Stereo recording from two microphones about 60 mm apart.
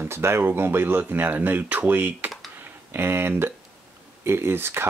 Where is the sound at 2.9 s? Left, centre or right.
Right.